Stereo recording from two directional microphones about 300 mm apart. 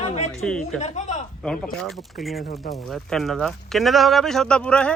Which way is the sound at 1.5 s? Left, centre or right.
Centre.